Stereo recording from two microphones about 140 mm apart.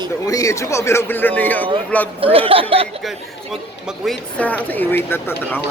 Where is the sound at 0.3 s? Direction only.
25° left (ahead or behind).